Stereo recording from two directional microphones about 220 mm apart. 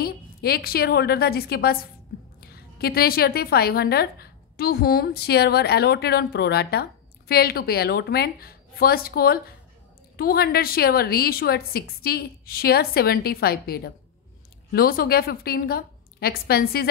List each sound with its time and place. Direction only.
0.0 s a woman's voice: 45° left (ahead or behind)